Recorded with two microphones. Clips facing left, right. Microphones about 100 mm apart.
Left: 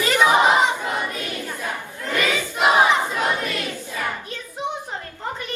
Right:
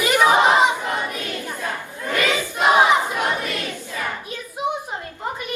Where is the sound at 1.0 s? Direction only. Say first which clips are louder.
Even; 20° right (ahead or behind).